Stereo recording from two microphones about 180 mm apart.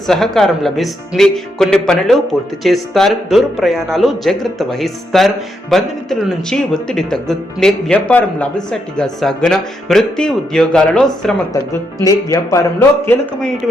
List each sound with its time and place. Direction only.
0.1 s speech: centre (ahead or behind)
12.0 s speech: 15° left (ahead or behind)